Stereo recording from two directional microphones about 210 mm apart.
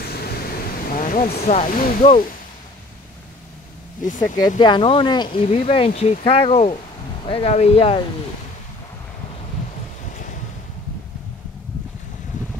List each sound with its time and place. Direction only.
0.0 s a sound: 45° left (ahead or behind)
2.0 s speech: 25° left (ahead or behind)
4.6 s speech: 20° left (ahead or behind)